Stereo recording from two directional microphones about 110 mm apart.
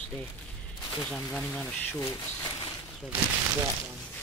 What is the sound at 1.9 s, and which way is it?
Speech, 30° left (ahead or behind).